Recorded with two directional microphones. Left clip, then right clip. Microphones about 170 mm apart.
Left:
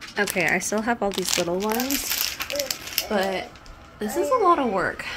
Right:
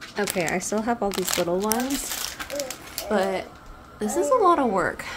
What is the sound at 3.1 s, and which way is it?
A woman's voice, 5° right (ahead or behind).